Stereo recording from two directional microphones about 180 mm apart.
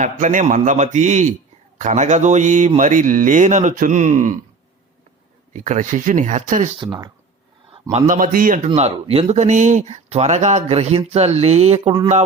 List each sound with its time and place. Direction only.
0.0 s a man's voice: 45° right (ahead or behind)
5.5 s a man's voice: 45° right (ahead or behind)
6.7 s speech: 25° right (ahead or behind)
7.7 s a man's voice: 35° right (ahead or behind)